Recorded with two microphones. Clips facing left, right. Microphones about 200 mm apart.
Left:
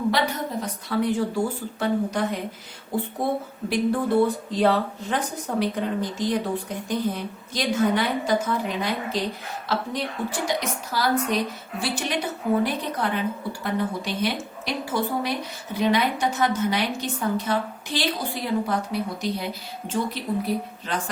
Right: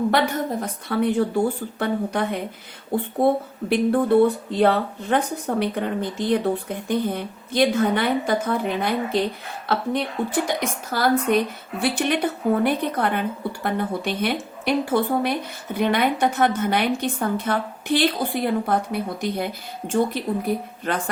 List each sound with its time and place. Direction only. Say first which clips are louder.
0.1 s speech: right 3 dB; 55° right (ahead or behind)
3.7 s speech: right 4 dB; 55° right (ahead or behind)